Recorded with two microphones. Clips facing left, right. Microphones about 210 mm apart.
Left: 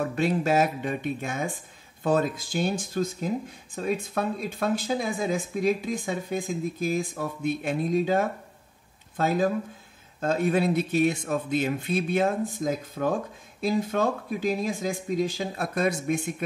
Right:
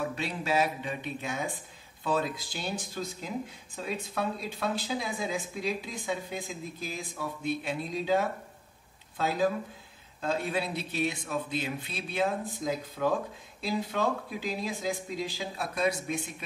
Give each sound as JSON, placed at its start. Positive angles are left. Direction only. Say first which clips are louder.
{"t": 0.0, "sound": "speech", "louder": "left 8 dB", "side_deg": 50}